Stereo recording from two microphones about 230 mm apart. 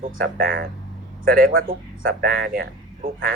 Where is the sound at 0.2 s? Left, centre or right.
Right.